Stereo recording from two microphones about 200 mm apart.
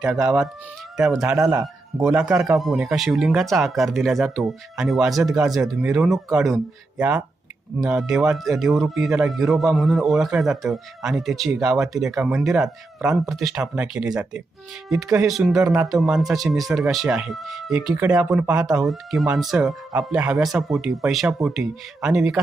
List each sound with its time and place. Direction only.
0.0 s speech: 5° right (ahead or behind)
1.4 s a man's voice: 15° right (ahead or behind)